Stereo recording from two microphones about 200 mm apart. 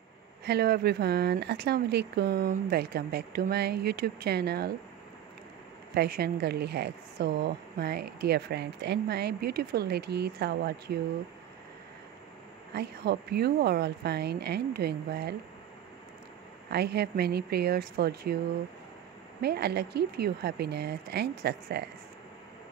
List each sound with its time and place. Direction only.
0.5 s speech: 55° right (ahead or behind)
5.9 s speech: 50° right (ahead or behind)
12.7 s speech: 55° right (ahead or behind)
16.7 s speech: 55° right (ahead or behind)
19.4 s speech: 55° right (ahead or behind)